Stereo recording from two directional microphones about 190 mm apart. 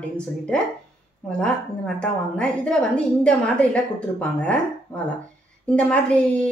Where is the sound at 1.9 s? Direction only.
5° left (ahead or behind).